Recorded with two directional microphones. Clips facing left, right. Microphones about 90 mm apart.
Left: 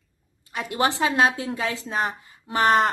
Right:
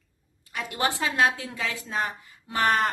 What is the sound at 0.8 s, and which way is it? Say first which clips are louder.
A woman's voice: left 4 dB; 30° left (ahead or behind).